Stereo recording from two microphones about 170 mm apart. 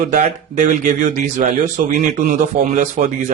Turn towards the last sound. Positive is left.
turn(degrees=-45)  # may be behind; listen again after turning